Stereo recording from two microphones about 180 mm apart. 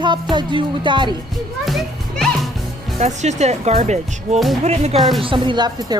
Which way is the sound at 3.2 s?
40° right (ahead or behind).